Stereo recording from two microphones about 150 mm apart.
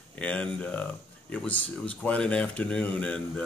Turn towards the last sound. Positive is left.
turn(degrees=10)  # may be behind; listen again after turning